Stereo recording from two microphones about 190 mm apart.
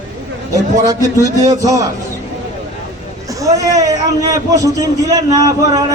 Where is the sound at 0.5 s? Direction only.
15° right (ahead or behind).